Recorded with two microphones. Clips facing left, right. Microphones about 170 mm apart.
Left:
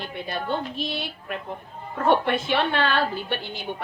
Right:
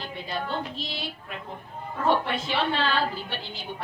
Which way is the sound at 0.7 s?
60° left (ahead or behind).